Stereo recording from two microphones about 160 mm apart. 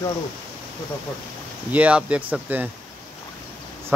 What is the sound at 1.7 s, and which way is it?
Speech, 10° right (ahead or behind).